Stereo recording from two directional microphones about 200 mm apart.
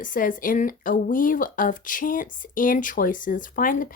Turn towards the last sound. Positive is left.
turn(degrees=45)  # may be behind; listen again after turning